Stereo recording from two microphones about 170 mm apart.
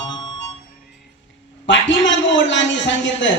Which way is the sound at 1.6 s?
90° left.